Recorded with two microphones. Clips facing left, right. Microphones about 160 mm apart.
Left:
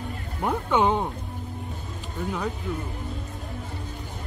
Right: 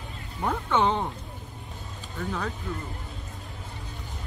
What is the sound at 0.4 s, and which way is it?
Speech, 15° left (ahead or behind).